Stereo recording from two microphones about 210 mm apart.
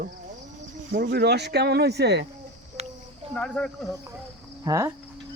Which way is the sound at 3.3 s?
5° left (ahead or behind).